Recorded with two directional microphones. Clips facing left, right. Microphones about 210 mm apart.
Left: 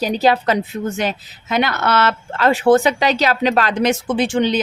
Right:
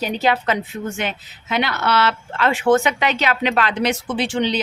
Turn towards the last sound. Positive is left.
turn(degrees=50)  # may be behind; listen again after turning